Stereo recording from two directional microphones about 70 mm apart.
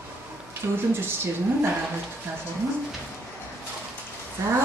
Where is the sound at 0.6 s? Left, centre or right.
Right.